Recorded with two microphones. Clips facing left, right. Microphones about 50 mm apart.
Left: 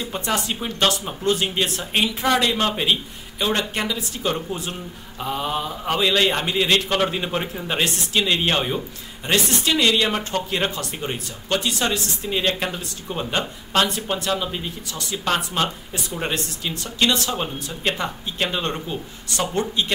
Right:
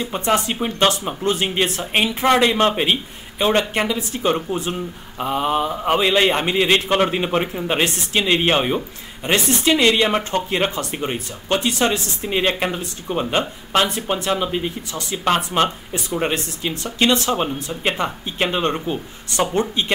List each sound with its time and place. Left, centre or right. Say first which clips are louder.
0.0 s a man's voice: right 5 dB; right